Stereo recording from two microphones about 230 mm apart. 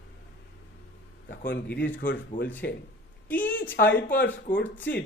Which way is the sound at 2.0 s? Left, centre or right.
Left.